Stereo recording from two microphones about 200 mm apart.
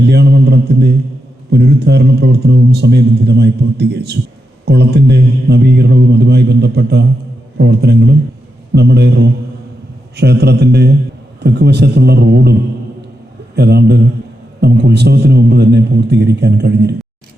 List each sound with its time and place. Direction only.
0.0 s mantra: 55° right (ahead or behind)
1.5 s a man's voice: 55° right (ahead or behind)
13.6 s a man's voice: 55° right (ahead or behind)